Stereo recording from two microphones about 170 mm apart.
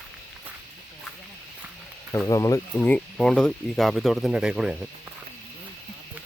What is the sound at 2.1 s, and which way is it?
Speech, 15° left (ahead or behind).